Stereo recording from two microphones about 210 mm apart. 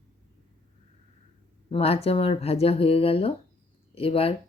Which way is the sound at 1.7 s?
30° left (ahead or behind).